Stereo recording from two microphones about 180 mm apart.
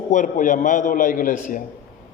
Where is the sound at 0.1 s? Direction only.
45° left (ahead or behind).